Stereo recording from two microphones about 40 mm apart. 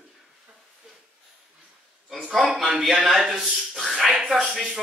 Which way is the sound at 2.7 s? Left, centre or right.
Centre.